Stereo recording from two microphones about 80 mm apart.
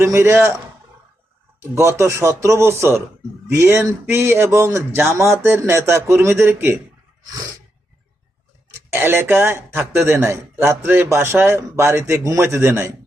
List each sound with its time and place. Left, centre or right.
0.0 s speech: right
1.7 s speech: right
8.9 s speech: right